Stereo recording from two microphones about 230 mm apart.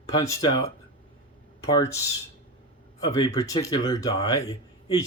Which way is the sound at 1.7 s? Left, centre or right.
Centre.